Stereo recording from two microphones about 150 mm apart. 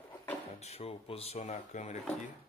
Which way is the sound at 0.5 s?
45° left (ahead or behind).